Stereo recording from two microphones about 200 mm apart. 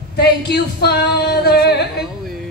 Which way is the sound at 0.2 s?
55° left (ahead or behind).